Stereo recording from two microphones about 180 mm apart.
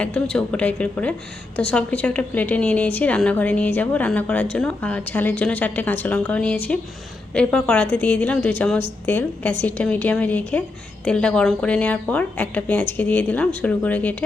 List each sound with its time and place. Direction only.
0.0 s a woman's voice: 5° left (ahead or behind)